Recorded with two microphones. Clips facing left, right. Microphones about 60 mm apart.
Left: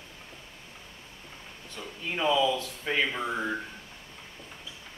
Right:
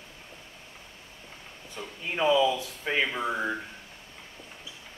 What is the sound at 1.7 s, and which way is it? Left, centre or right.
Speech, centre.